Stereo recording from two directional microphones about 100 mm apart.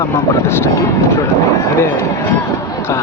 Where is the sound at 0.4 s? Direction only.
25° left (ahead or behind).